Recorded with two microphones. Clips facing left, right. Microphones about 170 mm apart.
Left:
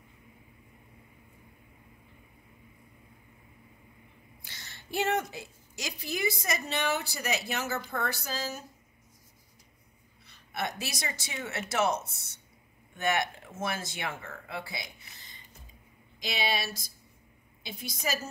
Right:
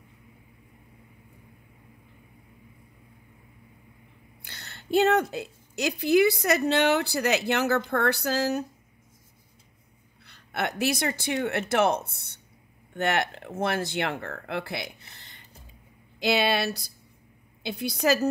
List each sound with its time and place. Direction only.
4.4 s a sound: 60° right (ahead or behind)
5.3 s a woman's voice: 60° right (ahead or behind)
10.2 s a woman's voice: 65° right (ahead or behind)